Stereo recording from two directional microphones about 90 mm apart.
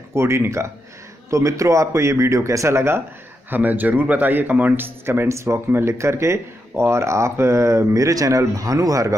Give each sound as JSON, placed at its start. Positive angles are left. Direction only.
{"t": 0.1, "sound": "a man's voice", "side_deg": -30}